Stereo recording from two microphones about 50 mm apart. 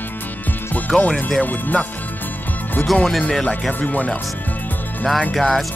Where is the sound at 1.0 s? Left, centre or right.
Left.